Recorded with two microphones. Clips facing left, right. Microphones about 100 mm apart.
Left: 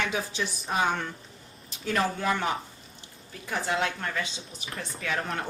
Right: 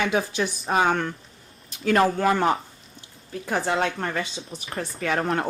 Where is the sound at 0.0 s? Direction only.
60° right (ahead or behind).